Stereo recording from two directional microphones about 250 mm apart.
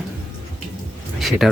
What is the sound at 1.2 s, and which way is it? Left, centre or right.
Speech, centre.